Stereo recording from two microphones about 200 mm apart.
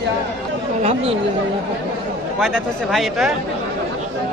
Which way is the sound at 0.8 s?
30° right (ahead or behind).